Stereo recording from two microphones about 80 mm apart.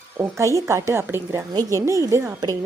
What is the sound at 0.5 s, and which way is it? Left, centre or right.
Speech, right.